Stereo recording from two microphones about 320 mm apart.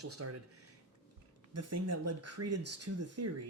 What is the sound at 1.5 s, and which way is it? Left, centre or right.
Speech, right.